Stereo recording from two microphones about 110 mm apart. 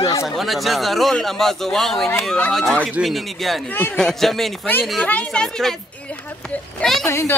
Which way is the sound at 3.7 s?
15° left (ahead or behind).